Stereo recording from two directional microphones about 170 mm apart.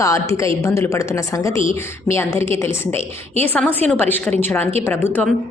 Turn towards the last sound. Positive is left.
turn(degrees=10)  # may be behind; listen again after turning